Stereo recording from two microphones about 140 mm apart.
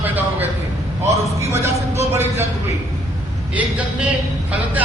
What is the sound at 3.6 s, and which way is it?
Speech, 10° right (ahead or behind).